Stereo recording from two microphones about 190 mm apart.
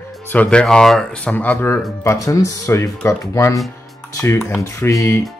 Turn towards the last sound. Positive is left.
turn(degrees=15)  # may be behind; listen again after turning